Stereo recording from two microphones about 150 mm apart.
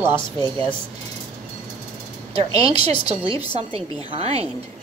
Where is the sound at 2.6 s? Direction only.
40° right (ahead or behind).